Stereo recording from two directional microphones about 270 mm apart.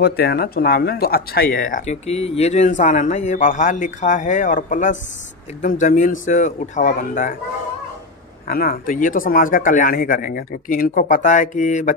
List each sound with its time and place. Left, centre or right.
0.0 s speech: left
8.5 s speech: left